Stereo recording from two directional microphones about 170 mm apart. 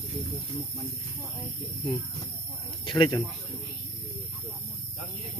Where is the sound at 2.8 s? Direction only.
30° left (ahead or behind).